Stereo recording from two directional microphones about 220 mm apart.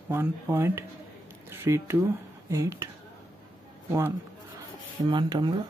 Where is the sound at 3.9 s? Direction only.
10° right (ahead or behind).